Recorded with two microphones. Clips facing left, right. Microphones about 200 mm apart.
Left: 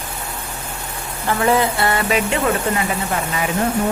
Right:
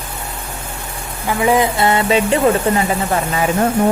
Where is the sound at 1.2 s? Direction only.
15° right (ahead or behind).